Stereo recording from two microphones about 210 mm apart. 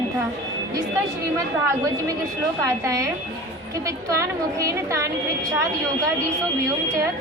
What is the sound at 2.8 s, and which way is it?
Speech, 15° right (ahead or behind).